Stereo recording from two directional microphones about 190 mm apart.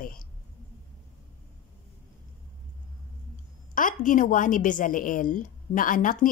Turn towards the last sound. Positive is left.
turn(degrees=45)  # may be behind; listen again after turning